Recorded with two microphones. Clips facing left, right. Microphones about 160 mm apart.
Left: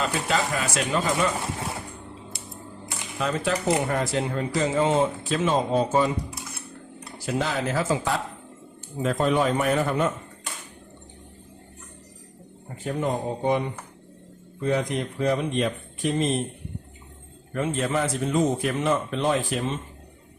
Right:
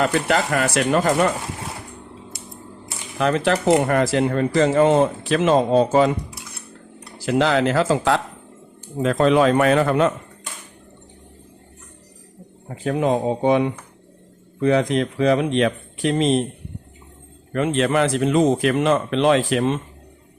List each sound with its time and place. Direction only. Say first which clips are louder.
0.0 s speech: right 6 dB; 70° right (ahead or behind)
3.2 s speech: right 7 dB; 70° right (ahead or behind)
7.3 s speech: right 8 dB; 90° right
12.6 s speech: right 7 dB; 90° right
17.5 s speech: right 6 dB; 80° right